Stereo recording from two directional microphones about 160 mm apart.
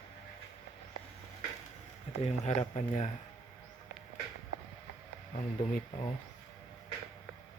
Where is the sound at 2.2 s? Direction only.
45° left (ahead or behind).